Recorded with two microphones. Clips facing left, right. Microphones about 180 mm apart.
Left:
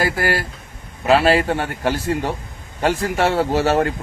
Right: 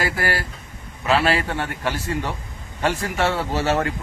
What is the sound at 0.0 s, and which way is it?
Speech, 45° left (ahead or behind).